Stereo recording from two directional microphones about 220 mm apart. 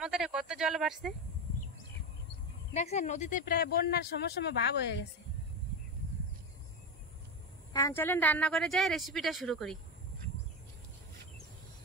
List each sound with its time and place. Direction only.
0.0 s speech: 5° right (ahead or behind)
2.7 s speech: 30° left (ahead or behind); by 4.9 s 50° left (ahead or behind)
7.7 s a woman's voice: 10° left (ahead or behind)